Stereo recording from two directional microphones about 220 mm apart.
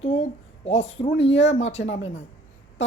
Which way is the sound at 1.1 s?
50° left (ahead or behind).